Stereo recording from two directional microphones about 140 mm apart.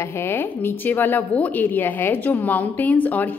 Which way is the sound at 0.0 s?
20° left (ahead or behind).